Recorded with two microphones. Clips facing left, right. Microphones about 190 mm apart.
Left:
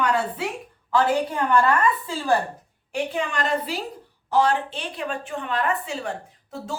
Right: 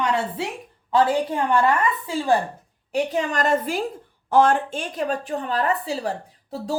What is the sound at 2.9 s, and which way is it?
A woman's voice, 40° right (ahead or behind).